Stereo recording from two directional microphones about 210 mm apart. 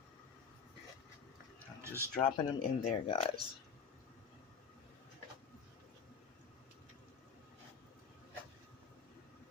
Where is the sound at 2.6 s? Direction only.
30° left (ahead or behind).